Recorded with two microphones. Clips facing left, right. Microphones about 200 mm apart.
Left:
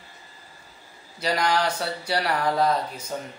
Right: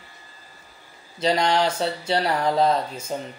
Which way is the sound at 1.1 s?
25° right (ahead or behind).